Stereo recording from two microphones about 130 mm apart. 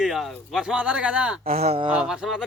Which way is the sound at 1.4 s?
50° right (ahead or behind).